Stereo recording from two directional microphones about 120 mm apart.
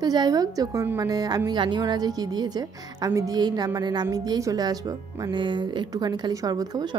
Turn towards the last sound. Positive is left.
turn(degrees=-30)  # may be behind; listen again after turning